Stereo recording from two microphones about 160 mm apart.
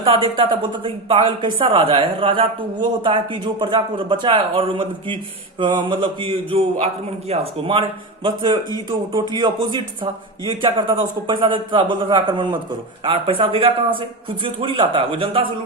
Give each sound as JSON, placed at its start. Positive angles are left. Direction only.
{"t": 0.0, "sound": "speech", "side_deg": -35}